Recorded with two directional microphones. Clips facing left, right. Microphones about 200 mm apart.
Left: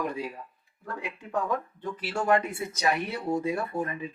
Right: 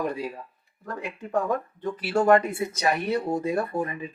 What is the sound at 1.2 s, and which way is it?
Speech, 40° right (ahead or behind).